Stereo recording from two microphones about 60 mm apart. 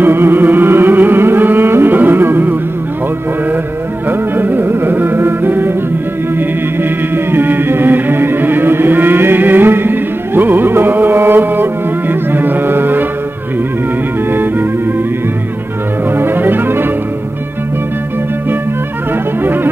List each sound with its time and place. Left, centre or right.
0.0 s music: right
4.1 s music: right
6.8 s music: right
14.3 s music: right
16.2 s music: right
19.4 s music: right